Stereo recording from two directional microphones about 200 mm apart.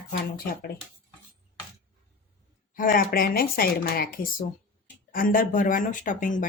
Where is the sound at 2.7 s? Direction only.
45° left (ahead or behind).